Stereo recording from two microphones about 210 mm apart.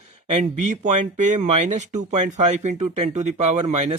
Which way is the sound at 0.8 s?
35° right (ahead or behind).